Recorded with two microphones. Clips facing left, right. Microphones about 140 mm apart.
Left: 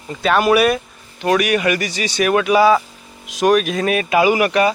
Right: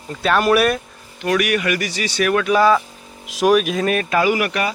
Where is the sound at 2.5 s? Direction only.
5° left (ahead or behind); by 4.7 s 25° left (ahead or behind).